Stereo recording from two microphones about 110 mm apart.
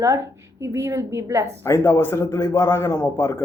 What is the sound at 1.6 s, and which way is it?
Speech, 25° left (ahead or behind).